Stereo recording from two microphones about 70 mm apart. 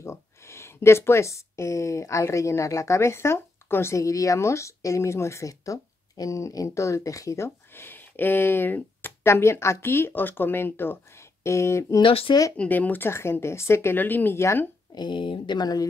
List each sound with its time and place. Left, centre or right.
0.0 s speech: left
5.5 s speech: left
9.2 s speech: left
12.5 s speech: left
13.1 s speech: left
13.9 s speech: left
15.0 s speech: left